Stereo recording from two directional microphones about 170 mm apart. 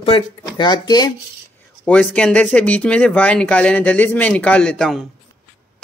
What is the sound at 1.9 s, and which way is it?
Speech, 5° left (ahead or behind).